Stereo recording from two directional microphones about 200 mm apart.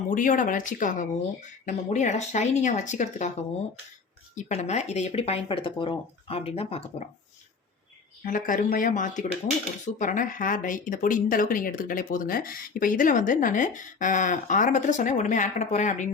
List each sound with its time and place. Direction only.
0.1 s speech: 40° left (ahead or behind)
4.4 s speech: 35° left (ahead or behind)
8.2 s speech: 40° left (ahead or behind)